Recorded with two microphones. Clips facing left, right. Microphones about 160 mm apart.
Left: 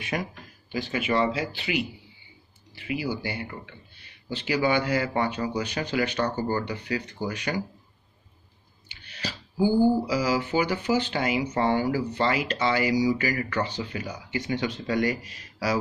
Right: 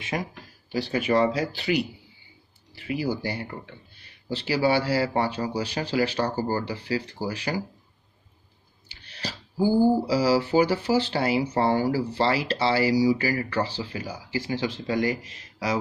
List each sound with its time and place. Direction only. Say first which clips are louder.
0.0 s speech: even; 25° right (ahead or behind)
0.7 s speech: right 3 dB; 35° right (ahead or behind)
8.8 s a sound: even; 35° right (ahead or behind)
10.0 s speech: right 4 dB; 35° right (ahead or behind)